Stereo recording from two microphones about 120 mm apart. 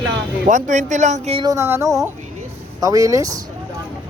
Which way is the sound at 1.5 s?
20° right (ahead or behind).